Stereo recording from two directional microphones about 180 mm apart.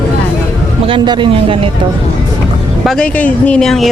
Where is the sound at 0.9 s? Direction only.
25° right (ahead or behind).